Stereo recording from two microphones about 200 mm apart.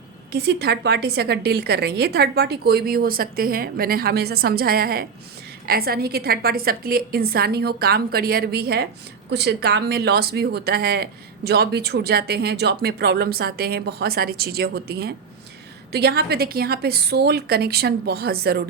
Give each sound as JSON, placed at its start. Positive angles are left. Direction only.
{"t": 0.3, "sound": "speech", "side_deg": -55}